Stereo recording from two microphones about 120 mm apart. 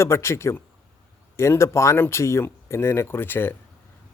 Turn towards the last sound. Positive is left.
turn(degrees=20)  # may be behind; listen again after turning